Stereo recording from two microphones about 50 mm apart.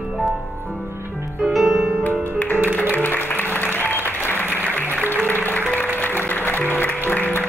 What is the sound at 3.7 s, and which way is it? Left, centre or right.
Applause, left.